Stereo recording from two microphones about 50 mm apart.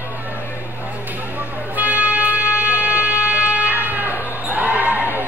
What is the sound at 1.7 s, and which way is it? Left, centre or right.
Music, right.